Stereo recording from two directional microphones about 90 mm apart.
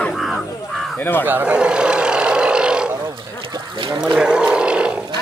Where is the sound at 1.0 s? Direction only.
20° left (ahead or behind).